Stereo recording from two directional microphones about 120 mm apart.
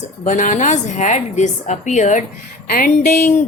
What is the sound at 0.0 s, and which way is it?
A woman's voice, 90° left.